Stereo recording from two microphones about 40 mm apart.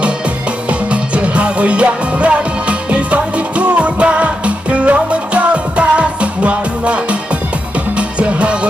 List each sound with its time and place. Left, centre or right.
0.8 s music: right
8.2 s music: right